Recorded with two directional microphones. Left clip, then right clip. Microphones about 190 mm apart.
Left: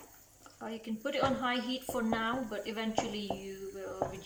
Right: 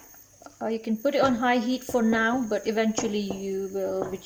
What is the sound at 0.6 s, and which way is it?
Speech, 45° right (ahead or behind).